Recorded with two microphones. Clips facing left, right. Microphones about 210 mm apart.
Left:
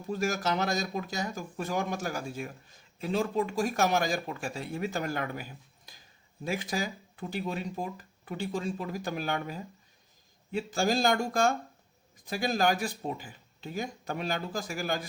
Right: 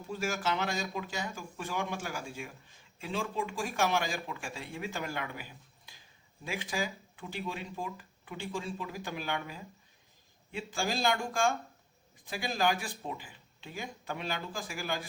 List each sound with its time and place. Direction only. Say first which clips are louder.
0.1 s speech: left 4 dB; 40° left (ahead or behind)